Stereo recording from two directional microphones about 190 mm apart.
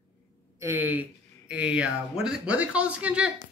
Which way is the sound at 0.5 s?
10° right (ahead or behind).